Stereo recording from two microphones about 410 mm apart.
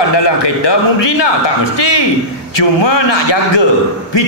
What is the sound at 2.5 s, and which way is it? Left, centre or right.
A man's voice, left.